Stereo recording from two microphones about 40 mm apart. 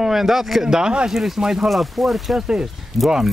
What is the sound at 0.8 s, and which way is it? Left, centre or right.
Speech, right.